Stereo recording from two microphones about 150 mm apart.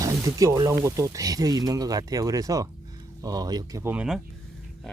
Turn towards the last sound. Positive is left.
turn(degrees=-5)  # may be behind; listen again after turning